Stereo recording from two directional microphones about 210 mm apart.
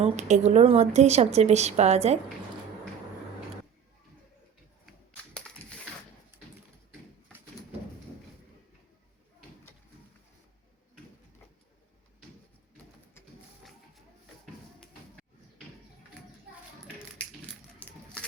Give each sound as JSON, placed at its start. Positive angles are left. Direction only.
{"t": 0.0, "sound": "a woman's voice", "side_deg": -35}
{"t": 4.9, "sound": "typewriter", "side_deg": 5}
{"t": 13.6, "sound": "music", "side_deg": 0}
{"t": 14.4, "sound": "a sound", "side_deg": 0}
{"t": 17.7, "sound": "coin", "side_deg": 5}